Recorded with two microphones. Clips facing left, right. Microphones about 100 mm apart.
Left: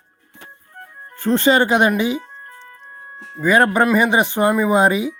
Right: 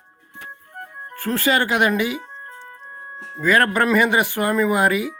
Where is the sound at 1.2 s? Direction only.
25° left (ahead or behind).